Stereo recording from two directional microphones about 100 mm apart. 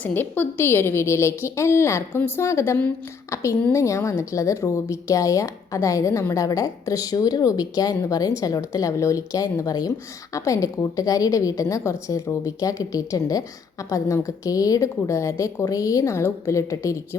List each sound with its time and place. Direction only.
0.0 s a woman's voice: 20° left (ahead or behind)
3.2 s a sound: 30° left (ahead or behind)
3.7 s a woman's voice: 30° left (ahead or behind)